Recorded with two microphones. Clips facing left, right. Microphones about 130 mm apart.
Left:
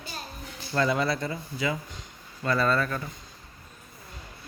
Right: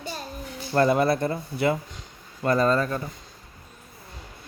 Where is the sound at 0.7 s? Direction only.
45° right (ahead or behind).